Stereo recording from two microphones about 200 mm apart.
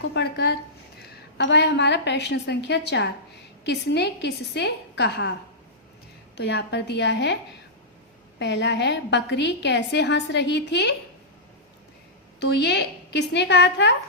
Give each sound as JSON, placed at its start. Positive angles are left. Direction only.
{"t": 0.1, "sound": "a woman's voice", "side_deg": 55}
{"t": 6.3, "sound": "a woman's voice", "side_deg": 60}
{"t": 8.4, "sound": "a woman's voice", "side_deg": 60}
{"t": 12.4, "sound": "a woman's voice", "side_deg": 55}